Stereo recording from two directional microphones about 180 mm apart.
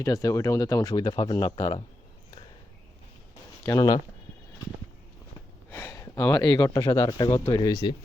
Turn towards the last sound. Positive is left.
turn(degrees=20)  # may be behind; listen again after turning